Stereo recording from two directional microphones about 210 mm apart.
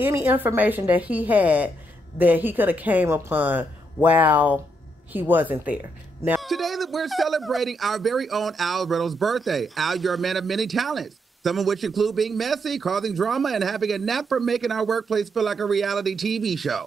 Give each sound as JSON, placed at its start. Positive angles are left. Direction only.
{"t": 0.0, "sound": "a man's voice", "side_deg": -10}